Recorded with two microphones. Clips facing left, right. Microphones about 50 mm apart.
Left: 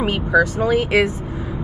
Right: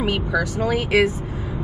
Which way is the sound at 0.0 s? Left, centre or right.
Left.